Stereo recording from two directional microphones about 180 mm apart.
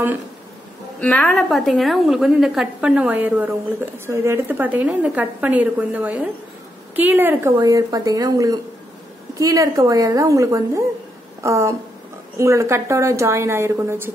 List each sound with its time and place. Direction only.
1.0 s a woman's voice: 10° left (ahead or behind); by 14.1 s 15° right (ahead or behind)